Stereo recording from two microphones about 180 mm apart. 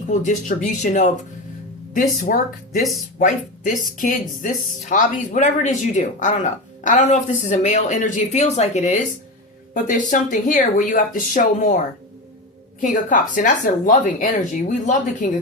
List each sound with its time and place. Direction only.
0.1 s speech: 45° left (ahead or behind)
12.8 s speech: 45° left (ahead or behind)